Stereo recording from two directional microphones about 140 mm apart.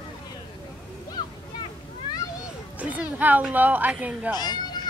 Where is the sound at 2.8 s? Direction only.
10° right (ahead or behind).